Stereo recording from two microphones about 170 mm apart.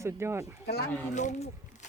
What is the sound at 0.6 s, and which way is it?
Speech, 70° left (ahead or behind).